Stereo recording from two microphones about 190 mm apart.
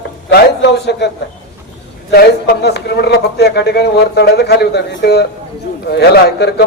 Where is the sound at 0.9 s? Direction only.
65° left (ahead or behind).